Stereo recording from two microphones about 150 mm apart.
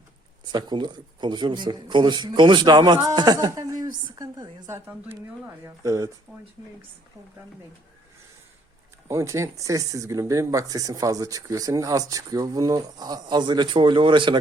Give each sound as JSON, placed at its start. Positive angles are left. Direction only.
{"t": 0.5, "sound": "speech", "side_deg": -30}
{"t": 6.3, "sound": "speech", "side_deg": 10}
{"t": 9.0, "sound": "speech", "side_deg": -20}